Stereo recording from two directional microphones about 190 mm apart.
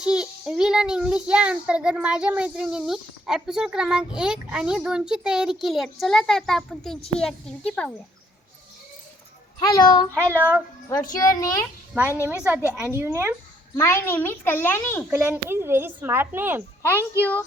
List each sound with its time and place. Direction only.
0.0 s a child's voice: 5° right (ahead or behind)
9.6 s a child's voice: 20° left (ahead or behind)
10.2 s a child's voice: 10° right (ahead or behind)
11.1 s a child's voice: 20° left (ahead or behind)
11.9 s a child's voice: 10° right (ahead or behind)
13.7 s a child's voice: 15° left (ahead or behind)
15.1 s a child's voice: 10° right (ahead or behind)